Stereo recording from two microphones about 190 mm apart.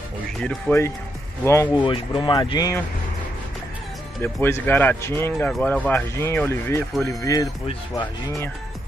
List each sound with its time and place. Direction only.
0.4 s speech: 5° left (ahead or behind)
4.2 s speech: 10° left (ahead or behind)